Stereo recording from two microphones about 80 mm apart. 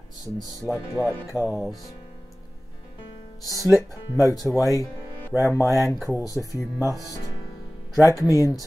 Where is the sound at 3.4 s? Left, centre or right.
Left.